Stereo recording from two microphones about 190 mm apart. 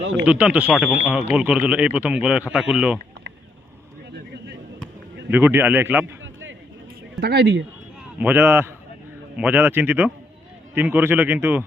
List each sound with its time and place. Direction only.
0.3 s a man's voice: 5° right (ahead or behind)
5.3 s a man's voice: 10° right (ahead or behind)
6.2 s a sound: 85° right
7.2 s speech: 60° right (ahead or behind)
8.2 s a man's voice: 10° right (ahead or behind)